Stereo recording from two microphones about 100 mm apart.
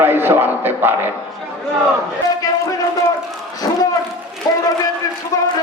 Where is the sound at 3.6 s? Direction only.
35° left (ahead or behind).